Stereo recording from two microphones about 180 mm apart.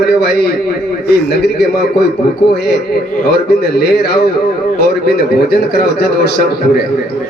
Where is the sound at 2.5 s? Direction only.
60° left (ahead or behind).